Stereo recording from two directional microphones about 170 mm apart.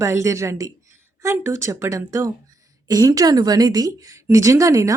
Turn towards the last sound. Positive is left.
turn(degrees=-20)  # may be behind; listen again after turning